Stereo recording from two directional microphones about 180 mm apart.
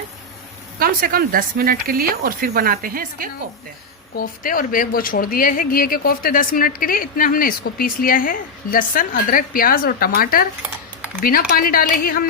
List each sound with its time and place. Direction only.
0.8 s speech: 55° right (ahead or behind)
4.1 s speech: 55° left (ahead or behind)